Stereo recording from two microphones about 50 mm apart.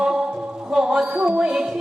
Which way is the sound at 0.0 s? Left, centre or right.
Centre.